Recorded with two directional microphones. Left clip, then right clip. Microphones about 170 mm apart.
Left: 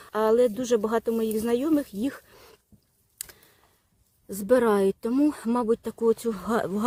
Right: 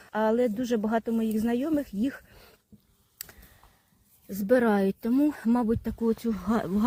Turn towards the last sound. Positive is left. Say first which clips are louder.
# left 2 dB
turn(degrees=25)  # may be behind; listen again after turning